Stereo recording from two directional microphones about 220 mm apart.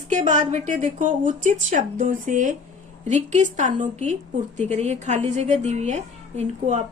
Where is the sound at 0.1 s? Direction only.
35° right (ahead or behind).